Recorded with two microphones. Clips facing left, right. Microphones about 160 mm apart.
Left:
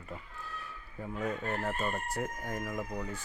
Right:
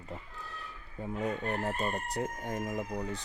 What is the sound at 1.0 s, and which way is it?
Speech, 25° right (ahead or behind).